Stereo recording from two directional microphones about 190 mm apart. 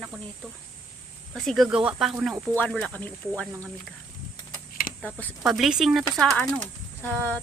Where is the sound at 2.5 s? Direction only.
5° left (ahead or behind).